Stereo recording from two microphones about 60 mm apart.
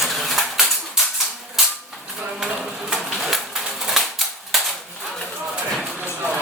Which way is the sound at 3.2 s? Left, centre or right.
Centre.